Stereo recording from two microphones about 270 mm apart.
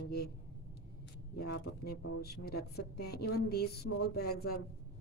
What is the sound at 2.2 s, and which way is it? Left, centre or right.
A woman's voice, left.